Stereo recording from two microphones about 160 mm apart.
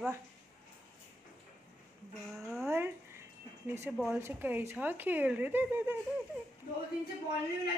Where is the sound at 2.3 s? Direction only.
Centre (ahead or behind).